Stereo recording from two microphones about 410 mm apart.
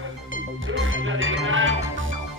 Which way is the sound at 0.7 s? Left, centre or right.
Right.